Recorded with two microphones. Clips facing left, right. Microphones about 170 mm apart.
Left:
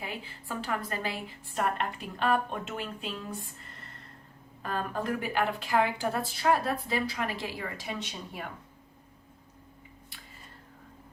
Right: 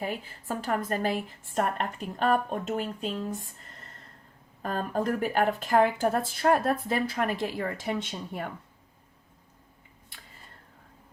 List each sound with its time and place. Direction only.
0.0 s a woman's voice: 45° right (ahead or behind)
4.6 s a woman's voice: 40° right (ahead or behind)